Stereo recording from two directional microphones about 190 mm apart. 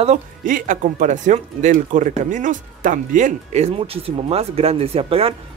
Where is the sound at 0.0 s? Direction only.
40° right (ahead or behind).